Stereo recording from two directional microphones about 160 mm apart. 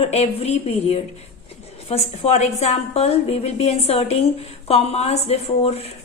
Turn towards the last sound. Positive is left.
turn(degrees=40)  # may be behind; listen again after turning